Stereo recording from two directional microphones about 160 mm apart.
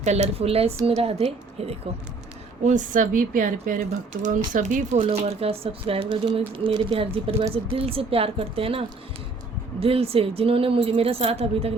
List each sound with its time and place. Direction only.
0.0 s a woman's voice: 45° right (ahead or behind)
2.6 s speech: 50° right (ahead or behind)
5.0 s a woman's voice: 40° right (ahead or behind)
9.8 s a woman's voice: 35° right (ahead or behind)